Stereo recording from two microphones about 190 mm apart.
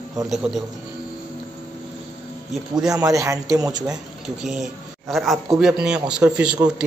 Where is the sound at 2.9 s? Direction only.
20° right (ahead or behind).